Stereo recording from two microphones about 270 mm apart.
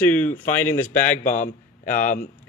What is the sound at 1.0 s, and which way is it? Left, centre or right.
Speech, left.